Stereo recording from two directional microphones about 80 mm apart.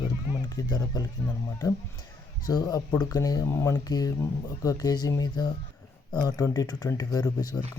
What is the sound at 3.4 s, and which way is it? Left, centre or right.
Speech, left.